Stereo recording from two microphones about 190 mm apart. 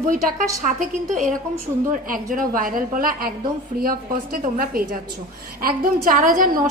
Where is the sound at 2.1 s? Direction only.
45° right (ahead or behind).